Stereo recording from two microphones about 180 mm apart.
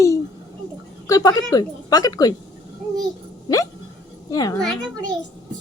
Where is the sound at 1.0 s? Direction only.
20° left (ahead or behind).